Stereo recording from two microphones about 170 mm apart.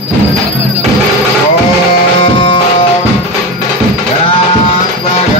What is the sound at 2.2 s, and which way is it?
Music, 30° left (ahead or behind).